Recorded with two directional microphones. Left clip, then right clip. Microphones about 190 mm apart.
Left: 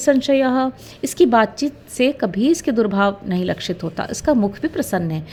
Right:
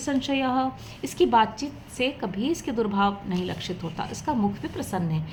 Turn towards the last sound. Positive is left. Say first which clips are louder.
# left 9 dB
turn(degrees=45)  # may be behind; listen again after turning